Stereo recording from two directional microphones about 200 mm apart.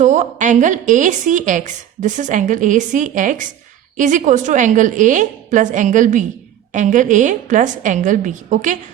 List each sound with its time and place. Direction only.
0.0 s a woman's voice: 35° right (ahead or behind)